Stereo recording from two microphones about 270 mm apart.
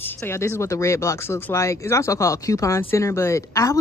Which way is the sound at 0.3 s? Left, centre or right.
Centre.